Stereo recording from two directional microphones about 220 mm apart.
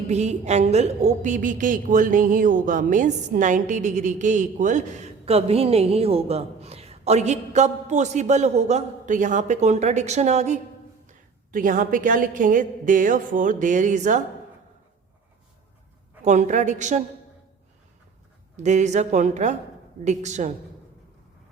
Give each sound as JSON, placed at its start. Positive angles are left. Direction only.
{"t": 0.1, "sound": "a woman's voice", "side_deg": -30}
{"t": 16.2, "sound": "a woman's voice", "side_deg": -35}
{"t": 18.5, "sound": "a woman's voice", "side_deg": -30}